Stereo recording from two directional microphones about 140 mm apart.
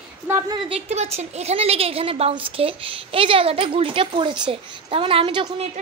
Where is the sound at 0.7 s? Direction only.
50° right (ahead or behind).